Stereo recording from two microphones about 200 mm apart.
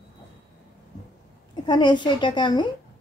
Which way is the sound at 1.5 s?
20° left (ahead or behind).